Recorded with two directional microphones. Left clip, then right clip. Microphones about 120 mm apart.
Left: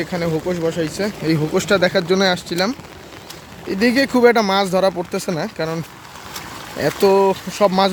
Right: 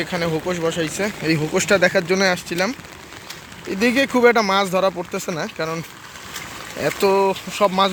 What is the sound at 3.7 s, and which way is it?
Speech, 25° left (ahead or behind).